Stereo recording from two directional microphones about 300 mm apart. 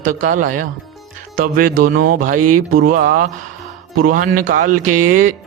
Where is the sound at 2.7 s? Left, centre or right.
Right.